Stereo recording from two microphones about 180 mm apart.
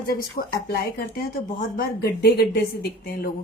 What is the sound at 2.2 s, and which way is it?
Speech, 60° left (ahead or behind).